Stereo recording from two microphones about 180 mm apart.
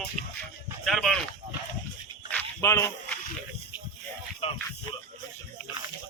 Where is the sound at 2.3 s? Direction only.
15° left (ahead or behind).